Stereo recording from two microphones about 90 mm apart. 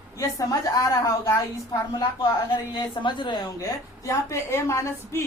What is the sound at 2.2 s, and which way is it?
A woman's voice, 55° left (ahead or behind).